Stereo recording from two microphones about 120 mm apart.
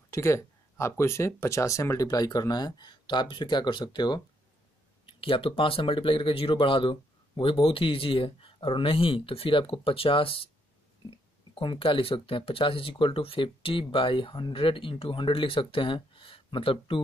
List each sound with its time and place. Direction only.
0.1 s speech: 25° left (ahead or behind); by 17.0 s 45° left (ahead or behind)